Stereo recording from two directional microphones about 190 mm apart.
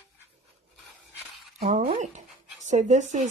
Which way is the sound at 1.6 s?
30° right (ahead or behind).